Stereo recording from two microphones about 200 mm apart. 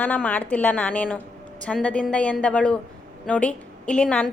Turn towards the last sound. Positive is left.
turn(degrees=5)  # may be behind; listen again after turning